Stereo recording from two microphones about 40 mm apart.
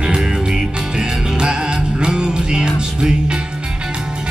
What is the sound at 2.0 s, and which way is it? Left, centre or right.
Music, right.